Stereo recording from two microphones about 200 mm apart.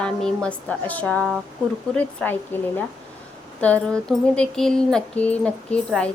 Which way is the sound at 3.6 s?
5° left (ahead or behind).